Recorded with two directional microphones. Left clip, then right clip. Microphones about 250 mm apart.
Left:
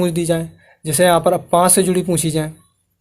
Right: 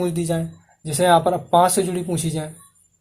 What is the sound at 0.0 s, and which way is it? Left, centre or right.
Speech, left.